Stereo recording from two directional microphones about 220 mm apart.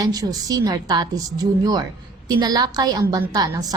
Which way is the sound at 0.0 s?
15° right (ahead or behind).